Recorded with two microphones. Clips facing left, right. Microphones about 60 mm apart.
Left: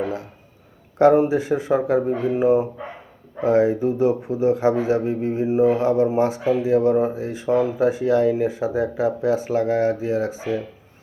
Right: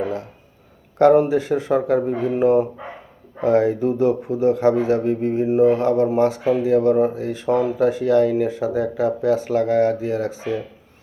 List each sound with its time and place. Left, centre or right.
1.2 s speech: centre